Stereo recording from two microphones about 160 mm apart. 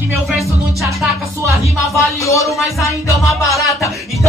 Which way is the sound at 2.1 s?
20° left (ahead or behind).